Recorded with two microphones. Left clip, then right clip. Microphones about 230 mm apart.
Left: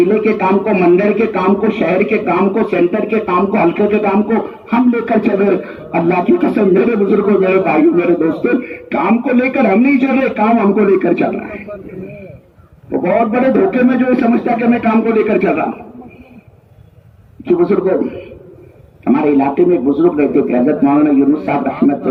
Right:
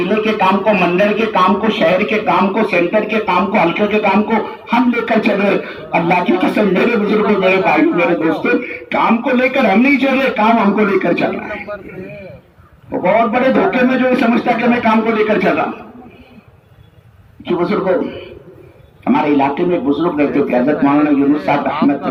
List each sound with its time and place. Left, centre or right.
0.1 s speech: right
13.0 s speech: right
17.4 s speech: right
19.0 s speech: right